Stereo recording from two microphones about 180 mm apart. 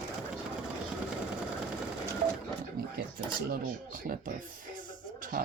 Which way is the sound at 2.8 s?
55° right (ahead or behind).